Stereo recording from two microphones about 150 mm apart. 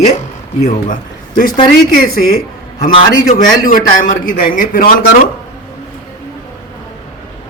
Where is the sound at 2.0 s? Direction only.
80° left.